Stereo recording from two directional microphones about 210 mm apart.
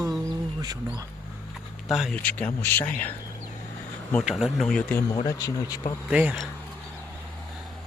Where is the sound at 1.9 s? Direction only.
Centre (ahead or behind).